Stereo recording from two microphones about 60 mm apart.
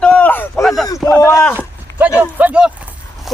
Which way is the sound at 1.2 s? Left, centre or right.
Left.